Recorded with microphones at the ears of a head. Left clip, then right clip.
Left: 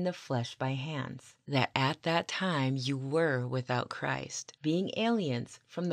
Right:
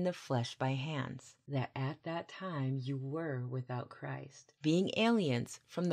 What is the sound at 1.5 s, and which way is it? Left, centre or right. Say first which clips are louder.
Speech: left 11 dB; left.